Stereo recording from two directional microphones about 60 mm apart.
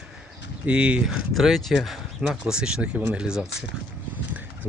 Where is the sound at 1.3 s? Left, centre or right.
Centre.